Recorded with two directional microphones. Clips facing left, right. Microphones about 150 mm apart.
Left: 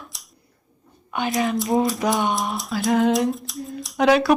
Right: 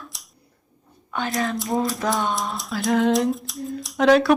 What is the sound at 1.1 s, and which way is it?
Whispering, 15° left (ahead or behind).